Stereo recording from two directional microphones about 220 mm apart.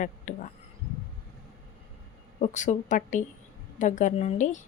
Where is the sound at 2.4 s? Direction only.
35° left (ahead or behind).